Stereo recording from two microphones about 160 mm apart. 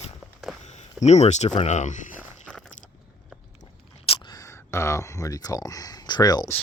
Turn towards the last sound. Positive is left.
turn(degrees=25)  # may be behind; listen again after turning